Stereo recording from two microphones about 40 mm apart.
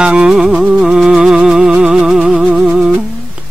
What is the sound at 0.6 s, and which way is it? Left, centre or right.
Music, centre.